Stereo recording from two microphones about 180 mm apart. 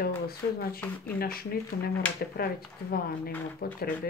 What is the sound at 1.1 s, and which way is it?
Speech, 55° left (ahead or behind).